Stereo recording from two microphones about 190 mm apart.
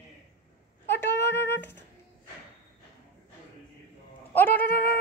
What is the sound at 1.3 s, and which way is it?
Music, 65° left (ahead or behind).